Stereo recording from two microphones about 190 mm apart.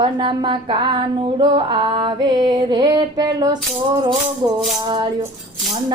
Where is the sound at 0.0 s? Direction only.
25° right (ahead or behind).